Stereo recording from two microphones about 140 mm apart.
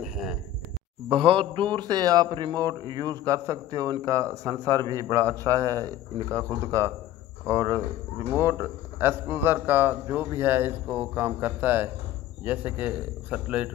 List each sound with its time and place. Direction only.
1.1 s speech: 40° right (ahead or behind); by 13.7 s 10° right (ahead or behind)